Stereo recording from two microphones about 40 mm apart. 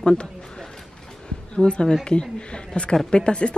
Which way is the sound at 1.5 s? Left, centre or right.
Left.